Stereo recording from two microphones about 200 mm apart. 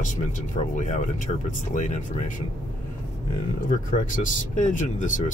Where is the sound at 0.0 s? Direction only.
40° left (ahead or behind).